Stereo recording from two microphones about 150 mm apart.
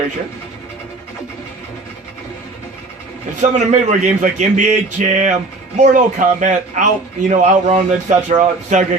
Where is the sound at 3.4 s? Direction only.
50° right (ahead or behind).